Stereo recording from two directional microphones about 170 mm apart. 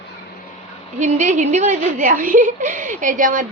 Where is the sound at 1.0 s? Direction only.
45° right (ahead or behind).